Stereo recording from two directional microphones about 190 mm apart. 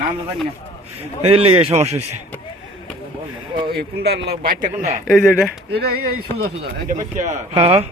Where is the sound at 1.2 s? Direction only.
30° right (ahead or behind).